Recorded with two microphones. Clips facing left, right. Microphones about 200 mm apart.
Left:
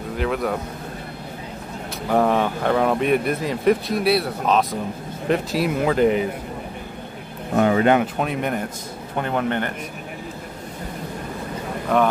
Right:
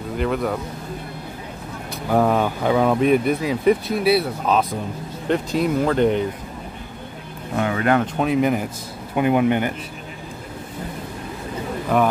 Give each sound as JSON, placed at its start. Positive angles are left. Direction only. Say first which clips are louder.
{"t": 0.2, "sound": "speech", "louder": "right 1 dB", "side_deg": 0}
{"t": 2.0, "sound": "speech", "louder": "right 1 dB", "side_deg": 0}
{"t": 7.5, "sound": "speech", "louder": "left 3 dB", "side_deg": 30}
{"t": 8.0, "sound": "speech", "louder": "right 4 dB", "side_deg": 0}
{"t": 11.9, "sound": "speech", "louder": "even", "side_deg": 0}